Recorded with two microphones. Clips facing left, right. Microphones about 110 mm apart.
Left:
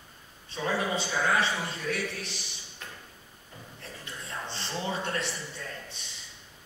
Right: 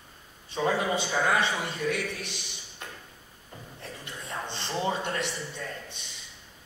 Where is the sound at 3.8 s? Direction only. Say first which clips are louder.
Right 2 dB; 20° right (ahead or behind).